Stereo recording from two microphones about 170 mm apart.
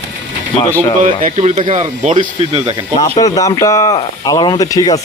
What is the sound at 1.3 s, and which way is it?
Speech, 35° right (ahead or behind).